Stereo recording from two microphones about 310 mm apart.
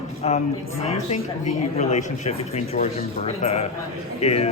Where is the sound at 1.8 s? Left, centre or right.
Left.